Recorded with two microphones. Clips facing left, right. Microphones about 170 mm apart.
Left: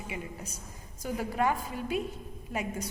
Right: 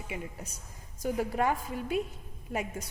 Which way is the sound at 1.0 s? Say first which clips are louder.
Right 1 dB; 45° right (ahead or behind).